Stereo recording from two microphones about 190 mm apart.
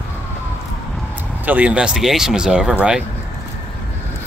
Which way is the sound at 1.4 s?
10° right (ahead or behind).